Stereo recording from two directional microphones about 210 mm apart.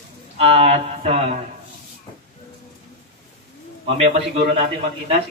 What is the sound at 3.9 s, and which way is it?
Speech, 30° right (ahead or behind).